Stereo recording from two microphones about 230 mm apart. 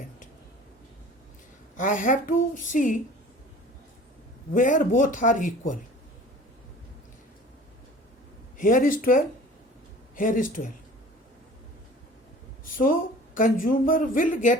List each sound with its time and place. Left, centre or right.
1.7 s speech: left
4.5 s speech: left
8.5 s speech: left
12.6 s speech: left